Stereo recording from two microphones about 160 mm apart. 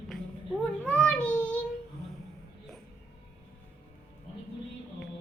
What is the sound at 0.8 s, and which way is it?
Child singing, 5° left (ahead or behind).